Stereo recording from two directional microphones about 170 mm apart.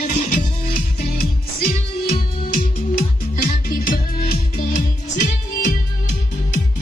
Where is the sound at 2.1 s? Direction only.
55° left (ahead or behind).